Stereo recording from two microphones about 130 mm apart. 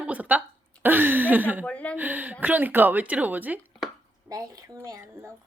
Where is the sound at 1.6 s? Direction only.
10° left (ahead or behind).